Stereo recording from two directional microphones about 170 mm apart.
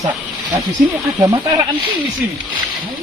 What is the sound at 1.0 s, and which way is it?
Speech, 25° right (ahead or behind).